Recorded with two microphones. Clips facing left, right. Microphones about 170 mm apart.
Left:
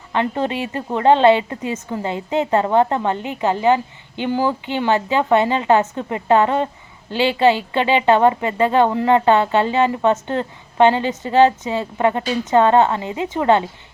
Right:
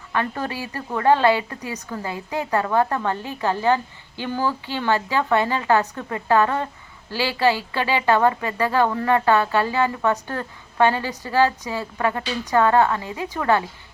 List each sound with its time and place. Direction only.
0.1 s a woman's voice: 20° left (ahead or behind)